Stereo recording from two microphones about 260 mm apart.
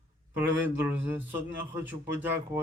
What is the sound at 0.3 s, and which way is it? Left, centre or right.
A man's voice, centre.